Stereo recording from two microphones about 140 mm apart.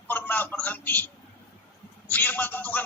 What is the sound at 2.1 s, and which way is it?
Speech, 15° left (ahead or behind).